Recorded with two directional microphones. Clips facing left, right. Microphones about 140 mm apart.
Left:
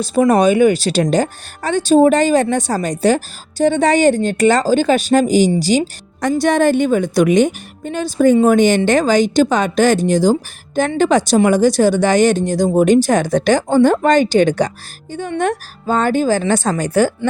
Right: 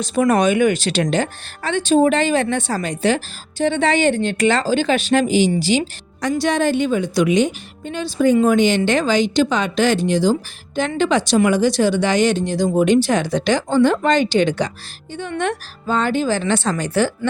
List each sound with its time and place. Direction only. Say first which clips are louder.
0.1 s speech: left 4 dB; 30° left (ahead or behind)